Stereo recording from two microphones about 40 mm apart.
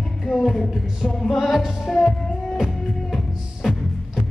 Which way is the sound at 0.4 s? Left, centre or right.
Centre.